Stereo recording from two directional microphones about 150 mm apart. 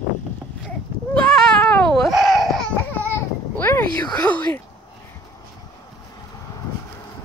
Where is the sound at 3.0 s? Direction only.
15° left (ahead or behind).